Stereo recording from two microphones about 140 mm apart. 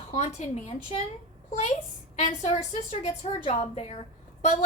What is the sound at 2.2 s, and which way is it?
Speech, 50° left (ahead or behind).